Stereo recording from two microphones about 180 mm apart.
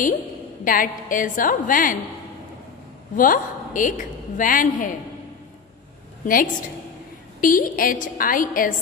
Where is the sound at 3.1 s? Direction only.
45° left (ahead or behind).